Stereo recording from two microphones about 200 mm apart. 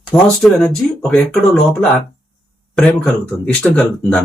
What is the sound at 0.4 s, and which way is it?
Speech, centre (ahead or behind).